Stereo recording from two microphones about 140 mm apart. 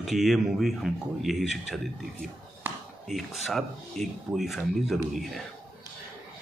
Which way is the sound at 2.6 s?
15° right (ahead or behind).